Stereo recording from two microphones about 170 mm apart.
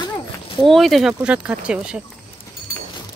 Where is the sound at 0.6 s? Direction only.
Centre (ahead or behind).